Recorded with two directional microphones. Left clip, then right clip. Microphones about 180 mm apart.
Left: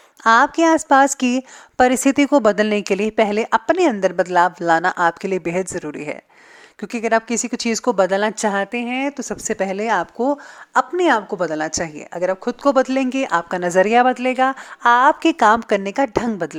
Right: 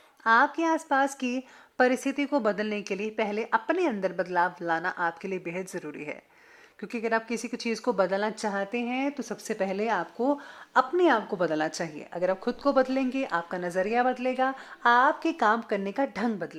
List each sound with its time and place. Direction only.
0.3 s a woman's voice: 40° left (ahead or behind)